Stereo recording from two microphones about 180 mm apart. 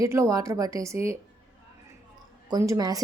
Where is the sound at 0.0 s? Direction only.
15° right (ahead or behind).